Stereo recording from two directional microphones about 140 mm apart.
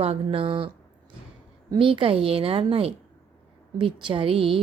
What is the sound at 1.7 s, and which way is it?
Speech, 40° right (ahead or behind).